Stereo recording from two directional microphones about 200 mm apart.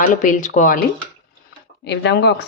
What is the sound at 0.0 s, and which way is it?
Speech, 40° left (ahead or behind).